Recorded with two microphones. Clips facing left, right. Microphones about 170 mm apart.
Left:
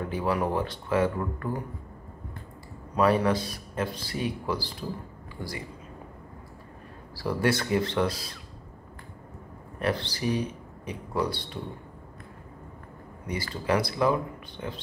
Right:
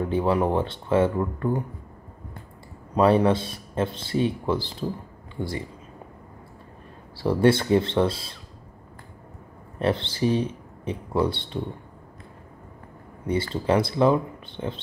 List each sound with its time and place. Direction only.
0.1 s speech: 25° right (ahead or behind)
3.0 s speech: 25° right (ahead or behind)
7.2 s speech: 25° right (ahead or behind)
9.8 s speech: 25° right (ahead or behind)
13.3 s speech: 25° right (ahead or behind)